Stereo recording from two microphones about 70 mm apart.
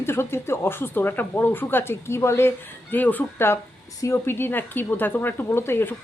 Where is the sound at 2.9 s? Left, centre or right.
Left.